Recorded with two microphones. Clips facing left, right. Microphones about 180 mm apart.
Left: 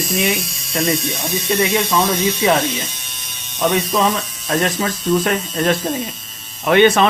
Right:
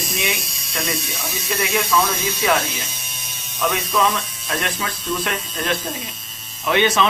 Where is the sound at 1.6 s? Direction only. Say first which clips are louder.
Left 2 dB; 30° left (ahead or behind).